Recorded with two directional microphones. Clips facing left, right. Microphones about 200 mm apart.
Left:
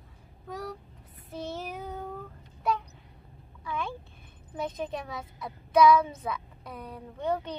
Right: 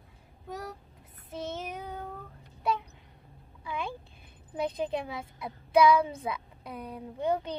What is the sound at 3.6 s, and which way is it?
Speech, 15° right (ahead or behind).